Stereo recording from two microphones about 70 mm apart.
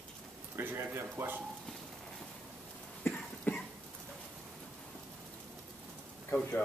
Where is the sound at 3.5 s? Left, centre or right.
Left.